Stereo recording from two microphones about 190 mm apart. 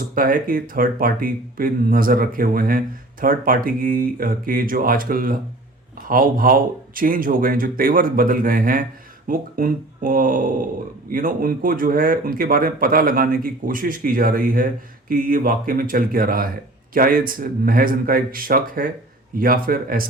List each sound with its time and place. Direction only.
0.0 s speech: 50° right (ahead or behind)